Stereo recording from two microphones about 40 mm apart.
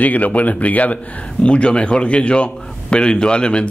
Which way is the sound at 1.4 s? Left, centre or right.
Left.